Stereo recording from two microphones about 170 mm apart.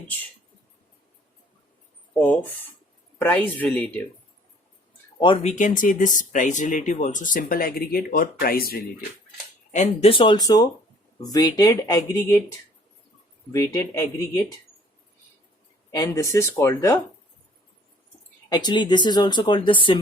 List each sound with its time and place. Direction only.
3.2 s speech: 10° left (ahead or behind)
5.2 s speech: 35° left (ahead or behind); by 8.8 s 60° left (ahead or behind)
9.7 s speech: 40° left (ahead or behind); by 14.4 s 20° left (ahead or behind)
15.9 s speech: 20° left (ahead or behind)
18.4 s speech: 25° left (ahead or behind)